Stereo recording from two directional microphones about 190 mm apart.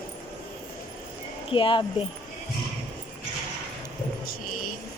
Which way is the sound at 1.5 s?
25° left (ahead or behind).